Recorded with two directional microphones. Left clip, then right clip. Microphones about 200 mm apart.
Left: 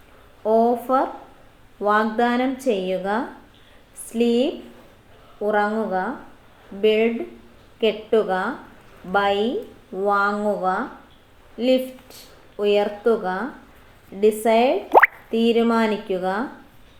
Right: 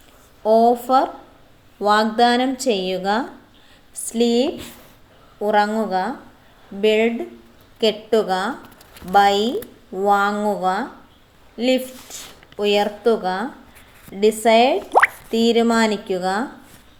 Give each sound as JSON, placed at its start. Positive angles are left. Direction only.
{"t": 0.6, "sound": "a woman's voice", "side_deg": -40}
{"t": 14.8, "sound": "plop", "side_deg": 5}
{"t": 15.3, "sound": "speech", "side_deg": -40}